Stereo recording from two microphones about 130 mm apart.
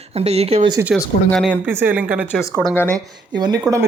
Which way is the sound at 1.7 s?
15° right (ahead or behind).